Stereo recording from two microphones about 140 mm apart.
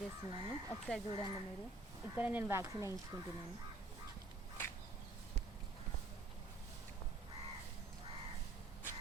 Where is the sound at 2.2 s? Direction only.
10° right (ahead or behind).